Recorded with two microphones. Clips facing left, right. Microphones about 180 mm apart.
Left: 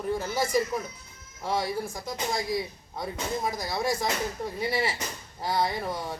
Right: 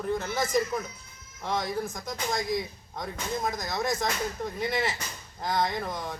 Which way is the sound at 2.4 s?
30° left (ahead or behind).